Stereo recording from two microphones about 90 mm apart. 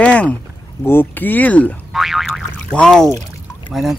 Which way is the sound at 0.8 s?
25° left (ahead or behind).